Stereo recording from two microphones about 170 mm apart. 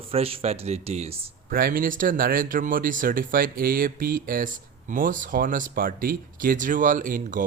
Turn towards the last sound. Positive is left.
turn(degrees=-50)  # may be behind; listen again after turning